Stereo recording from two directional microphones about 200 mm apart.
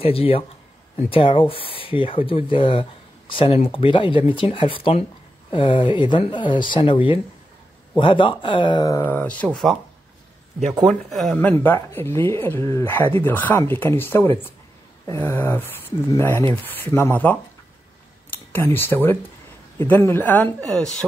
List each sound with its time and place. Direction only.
0.0 s speech: 30° left (ahead or behind); by 9.8 s 5° left (ahead or behind)
10.8 s speech: centre (ahead or behind)